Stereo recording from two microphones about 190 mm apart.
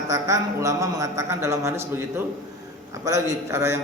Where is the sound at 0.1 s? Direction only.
15° right (ahead or behind).